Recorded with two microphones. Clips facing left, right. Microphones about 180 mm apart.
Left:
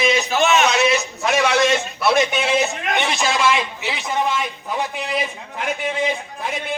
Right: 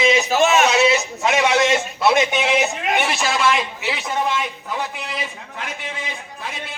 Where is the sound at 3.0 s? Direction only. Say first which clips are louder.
Left 2 dB; 5° right (ahead or behind).